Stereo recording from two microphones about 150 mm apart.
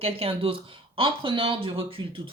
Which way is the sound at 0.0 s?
40° right (ahead or behind).